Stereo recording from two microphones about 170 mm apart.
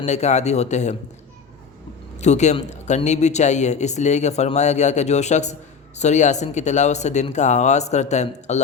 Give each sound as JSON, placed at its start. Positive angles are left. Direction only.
{"t": 0.0, "sound": "speech", "side_deg": 40}
{"t": 2.1, "sound": "a woman's voice", "side_deg": 40}